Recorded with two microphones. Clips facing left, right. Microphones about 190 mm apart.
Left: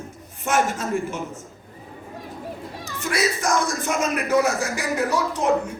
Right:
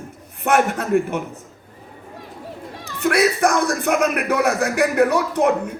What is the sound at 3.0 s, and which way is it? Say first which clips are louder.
A man's voice: right 7 dB; 60° right (ahead or behind).